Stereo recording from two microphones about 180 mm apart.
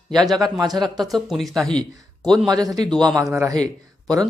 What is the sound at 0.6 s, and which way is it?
Speech, 20° right (ahead or behind).